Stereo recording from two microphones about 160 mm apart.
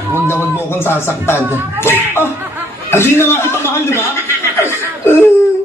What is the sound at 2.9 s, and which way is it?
A man's voice, 15° left (ahead or behind).